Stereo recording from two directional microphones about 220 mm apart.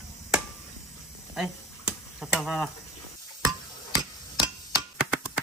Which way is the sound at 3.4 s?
15° right (ahead or behind).